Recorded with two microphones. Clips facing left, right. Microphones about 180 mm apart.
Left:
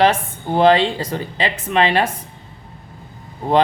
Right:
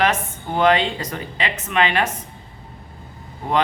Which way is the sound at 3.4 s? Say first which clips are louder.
Left 5 dB; 35° left (ahead or behind).